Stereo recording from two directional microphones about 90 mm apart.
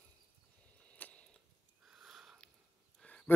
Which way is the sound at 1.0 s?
20° left (ahead or behind).